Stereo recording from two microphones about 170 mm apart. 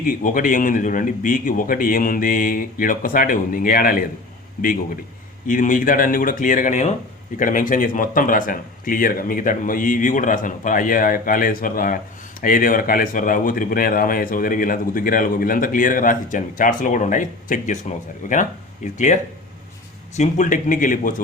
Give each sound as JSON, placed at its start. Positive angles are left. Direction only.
{"t": 0.0, "sound": "speech", "side_deg": 55}
{"t": 5.5, "sound": "speech", "side_deg": 50}